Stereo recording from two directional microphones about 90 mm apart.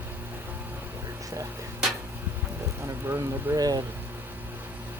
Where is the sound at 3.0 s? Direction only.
30° right (ahead or behind).